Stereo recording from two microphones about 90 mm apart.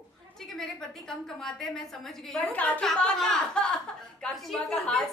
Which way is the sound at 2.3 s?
15° left (ahead or behind).